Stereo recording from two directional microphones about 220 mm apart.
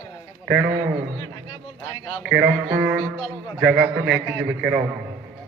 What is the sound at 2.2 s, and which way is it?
A man's voice, 5° right (ahead or behind).